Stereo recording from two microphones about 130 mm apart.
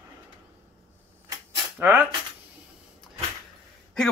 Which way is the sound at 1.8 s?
15° right (ahead or behind).